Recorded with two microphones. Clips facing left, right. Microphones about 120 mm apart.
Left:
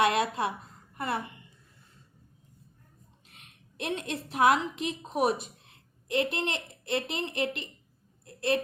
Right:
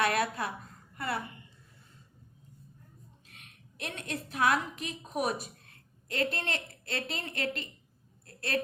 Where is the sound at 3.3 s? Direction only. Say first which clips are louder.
Right 1 dB; 30° left (ahead or behind).